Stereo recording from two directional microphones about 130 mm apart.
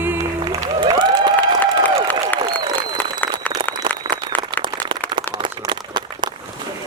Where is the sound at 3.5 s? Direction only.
30° right (ahead or behind).